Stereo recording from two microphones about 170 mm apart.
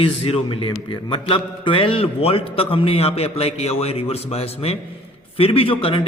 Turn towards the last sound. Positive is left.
turn(degrees=30)  # may be behind; listen again after turning